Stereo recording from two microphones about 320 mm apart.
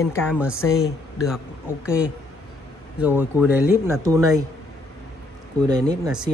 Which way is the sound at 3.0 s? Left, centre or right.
Centre.